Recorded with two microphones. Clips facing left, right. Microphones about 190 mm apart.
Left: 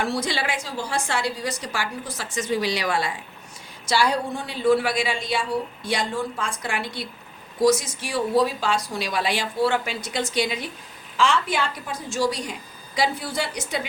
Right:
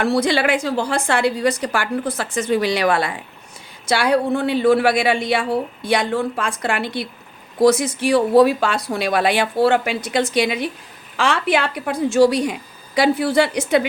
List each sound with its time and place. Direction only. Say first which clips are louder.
0.0 s a woman's voice: right 8 dB; 65° right (ahead or behind)